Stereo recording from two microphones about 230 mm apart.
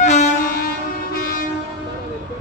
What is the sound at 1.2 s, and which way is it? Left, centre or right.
Train, left.